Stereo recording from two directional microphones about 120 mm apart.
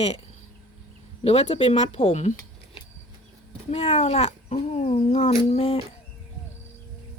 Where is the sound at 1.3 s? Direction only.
55° left (ahead or behind).